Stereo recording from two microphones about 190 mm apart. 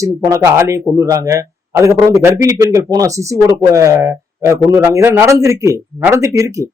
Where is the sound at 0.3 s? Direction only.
15° right (ahead or behind).